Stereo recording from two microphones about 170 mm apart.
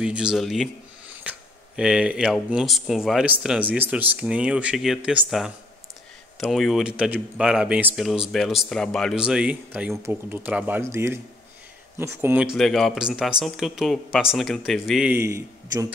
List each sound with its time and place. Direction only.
0.0 s speech: 5° right (ahead or behind)
1.3 s a sound: 10° right (ahead or behind)
1.8 s speech: 5° right (ahead or behind)
6.4 s a man's voice: centre (ahead or behind)
12.5 s speech: centre (ahead or behind)
15.1 s a man's voice: 15° right (ahead or behind)